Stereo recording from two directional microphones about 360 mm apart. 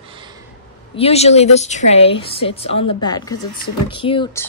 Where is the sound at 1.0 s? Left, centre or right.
Centre.